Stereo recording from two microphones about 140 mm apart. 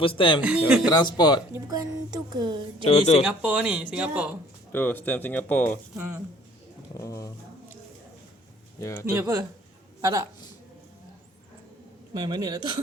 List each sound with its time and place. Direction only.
0.0 s speech: 40° left (ahead or behind)
0.4 s speech: 5° right (ahead or behind)
0.9 s a man's voice: 30° left (ahead or behind)
1.5 s speech: 25° right (ahead or behind)
2.9 s speech: 50° left (ahead or behind)
3.2 s speech: 5° right (ahead or behind)
4.7 s speech: 15° left (ahead or behind)
6.9 s a man's voice: 20° left (ahead or behind)
8.8 s a man's voice: 20° left (ahead or behind)
9.1 s speech: 20° right (ahead or behind)
12.1 s speech: 30° right (ahead or behind)